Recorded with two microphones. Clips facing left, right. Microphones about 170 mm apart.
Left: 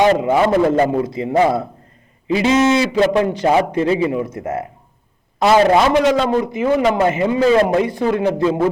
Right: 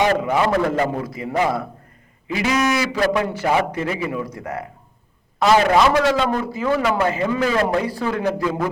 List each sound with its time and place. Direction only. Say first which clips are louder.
0.1 s a man's voice: left 4 dB; 25° left (ahead or behind)
5.6 s a man's voice: left 3 dB; 20° left (ahead or behind)